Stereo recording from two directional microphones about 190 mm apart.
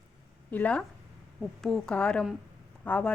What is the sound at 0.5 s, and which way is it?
A woman's voice, 5° left (ahead or behind).